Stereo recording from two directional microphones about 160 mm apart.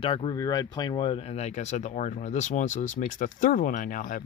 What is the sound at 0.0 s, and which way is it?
Speech, 35° left (ahead or behind).